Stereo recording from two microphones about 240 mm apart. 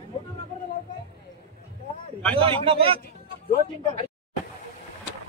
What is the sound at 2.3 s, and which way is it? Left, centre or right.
Speech, right.